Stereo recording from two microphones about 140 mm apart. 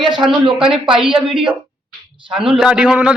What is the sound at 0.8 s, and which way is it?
Speech, 35° right (ahead or behind).